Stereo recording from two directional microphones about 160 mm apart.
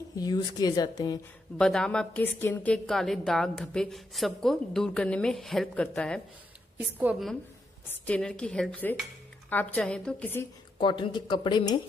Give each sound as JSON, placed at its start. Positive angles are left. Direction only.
{"t": 0.2, "sound": "a woman's voice", "side_deg": 25}
{"t": 1.6, "sound": "a woman's voice", "side_deg": 5}
{"t": 6.8, "sound": "a woman's voice", "side_deg": -10}
{"t": 7.9, "sound": "a woman's voice", "side_deg": 10}
{"t": 10.8, "sound": "a woman's voice", "side_deg": 30}